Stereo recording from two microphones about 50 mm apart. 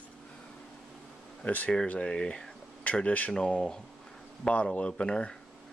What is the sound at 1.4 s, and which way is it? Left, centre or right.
Speech, left.